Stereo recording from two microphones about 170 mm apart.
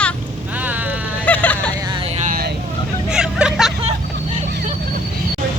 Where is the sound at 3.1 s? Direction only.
5° right (ahead or behind).